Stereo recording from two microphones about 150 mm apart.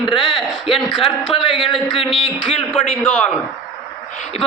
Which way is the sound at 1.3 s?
30° left (ahead or behind).